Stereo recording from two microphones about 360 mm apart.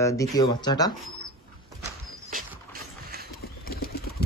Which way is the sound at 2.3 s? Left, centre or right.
Right.